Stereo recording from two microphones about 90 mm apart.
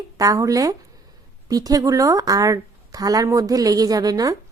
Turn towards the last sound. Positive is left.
turn(degrees=-45)  # may be behind; listen again after turning